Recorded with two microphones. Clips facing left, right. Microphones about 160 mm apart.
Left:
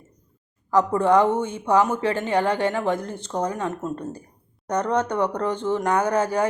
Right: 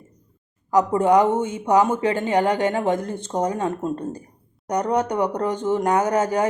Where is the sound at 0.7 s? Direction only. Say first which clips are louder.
Right 1 dB; 15° right (ahead or behind).